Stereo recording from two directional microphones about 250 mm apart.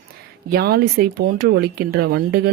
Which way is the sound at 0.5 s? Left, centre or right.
Right.